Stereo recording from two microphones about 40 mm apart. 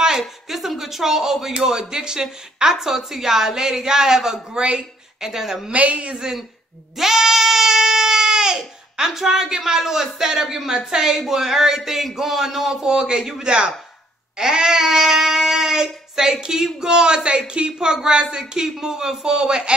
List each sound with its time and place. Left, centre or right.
0.5 s speech: centre
5.7 s speech: right
7.0 s goat: centre
10.1 s speech: centre